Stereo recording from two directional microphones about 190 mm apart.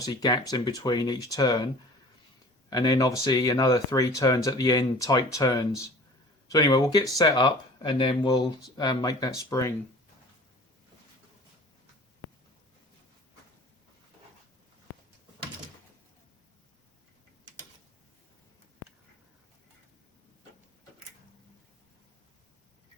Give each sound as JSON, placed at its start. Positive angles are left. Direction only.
{"t": 0.0, "sound": "speech", "side_deg": 20}